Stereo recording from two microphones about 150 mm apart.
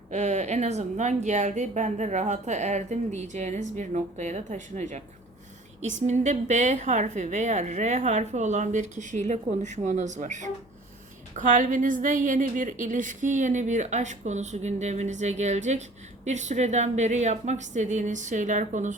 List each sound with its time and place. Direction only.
0.1 s speech: 50° right (ahead or behind)